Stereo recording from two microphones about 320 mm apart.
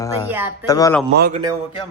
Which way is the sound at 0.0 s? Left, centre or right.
Centre.